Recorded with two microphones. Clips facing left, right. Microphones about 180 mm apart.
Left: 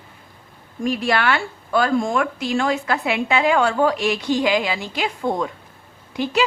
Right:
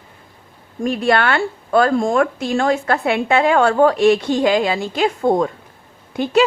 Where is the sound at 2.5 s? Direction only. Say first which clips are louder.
Right 4 dB; 50° right (ahead or behind).